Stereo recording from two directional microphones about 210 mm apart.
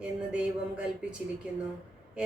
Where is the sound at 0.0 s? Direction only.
5° right (ahead or behind).